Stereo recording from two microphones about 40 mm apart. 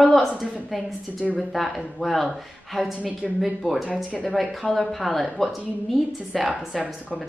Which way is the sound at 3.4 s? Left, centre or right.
Centre.